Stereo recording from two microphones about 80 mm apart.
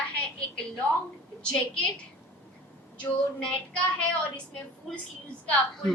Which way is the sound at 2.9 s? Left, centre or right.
Centre.